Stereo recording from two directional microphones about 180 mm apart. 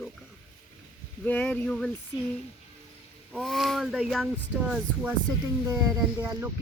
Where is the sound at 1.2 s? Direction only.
5° left (ahead or behind).